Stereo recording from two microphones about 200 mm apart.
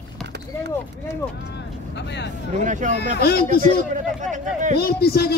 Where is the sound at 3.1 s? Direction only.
50° left (ahead or behind).